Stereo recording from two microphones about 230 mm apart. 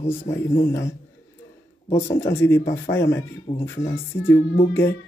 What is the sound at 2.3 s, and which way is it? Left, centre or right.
Speech, centre.